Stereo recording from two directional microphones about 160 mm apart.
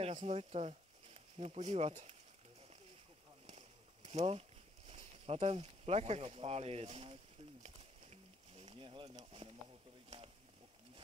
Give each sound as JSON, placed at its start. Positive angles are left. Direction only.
{"t": 0.0, "sound": "speech", "side_deg": -40}
{"t": 3.4, "sound": "a sound", "side_deg": -45}
{"t": 9.1, "sound": "speech", "side_deg": -40}